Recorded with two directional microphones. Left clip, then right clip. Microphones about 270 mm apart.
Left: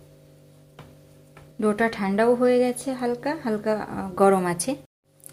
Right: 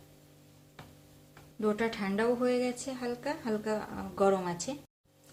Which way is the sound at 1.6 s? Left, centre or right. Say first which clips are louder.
Left 8 dB; left.